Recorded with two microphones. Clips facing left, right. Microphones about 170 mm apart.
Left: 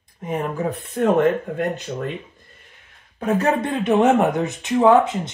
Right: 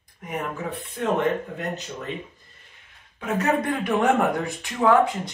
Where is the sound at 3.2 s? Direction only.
30° left (ahead or behind).